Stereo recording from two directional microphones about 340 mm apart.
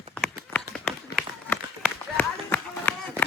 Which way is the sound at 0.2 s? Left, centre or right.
Centre.